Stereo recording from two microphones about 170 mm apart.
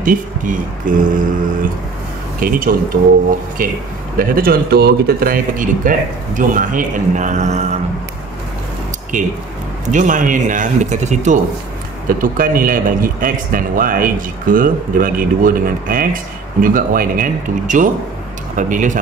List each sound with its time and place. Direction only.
0.0 s speech: 50° right (ahead or behind)
4.2 s speech: 60° right (ahead or behind); by 7.7 s 45° right (ahead or behind)
9.1 s speech: 50° right (ahead or behind)